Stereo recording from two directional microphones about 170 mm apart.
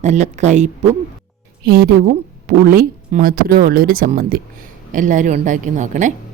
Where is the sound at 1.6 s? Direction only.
60° right (ahead or behind).